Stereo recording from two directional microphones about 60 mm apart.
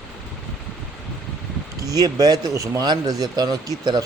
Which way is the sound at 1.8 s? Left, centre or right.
Right.